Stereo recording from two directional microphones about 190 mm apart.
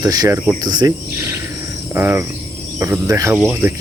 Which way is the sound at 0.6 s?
20° right (ahead or behind).